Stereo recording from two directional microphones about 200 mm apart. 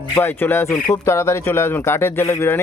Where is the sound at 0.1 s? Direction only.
10° left (ahead or behind).